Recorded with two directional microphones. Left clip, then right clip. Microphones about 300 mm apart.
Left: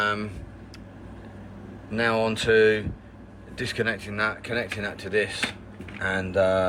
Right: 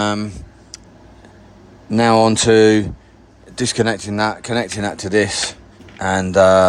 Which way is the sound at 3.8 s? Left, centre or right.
Right.